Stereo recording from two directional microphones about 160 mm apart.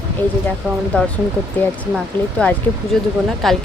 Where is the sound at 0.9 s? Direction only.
5° left (ahead or behind).